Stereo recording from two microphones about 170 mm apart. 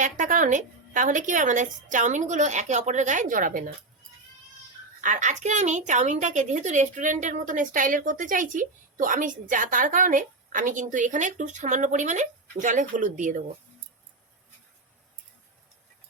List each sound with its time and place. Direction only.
0.0 s a woman's voice: 50° right (ahead or behind)
4.9 s a woman's voice: 50° right (ahead or behind)